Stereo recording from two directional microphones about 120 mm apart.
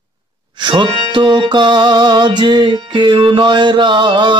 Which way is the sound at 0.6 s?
40° right (ahead or behind).